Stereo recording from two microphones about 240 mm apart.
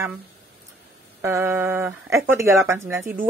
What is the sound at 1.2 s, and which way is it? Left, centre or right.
Speech, centre.